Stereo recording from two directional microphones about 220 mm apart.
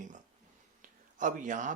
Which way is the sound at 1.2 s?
35° right (ahead or behind).